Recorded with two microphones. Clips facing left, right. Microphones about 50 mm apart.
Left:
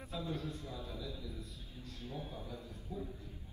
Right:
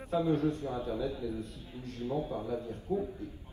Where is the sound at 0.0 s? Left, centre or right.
Right.